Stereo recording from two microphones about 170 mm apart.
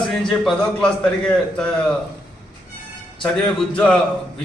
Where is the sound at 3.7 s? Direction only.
5° left (ahead or behind).